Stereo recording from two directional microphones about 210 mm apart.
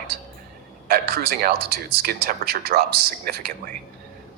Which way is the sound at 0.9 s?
45° right (ahead or behind).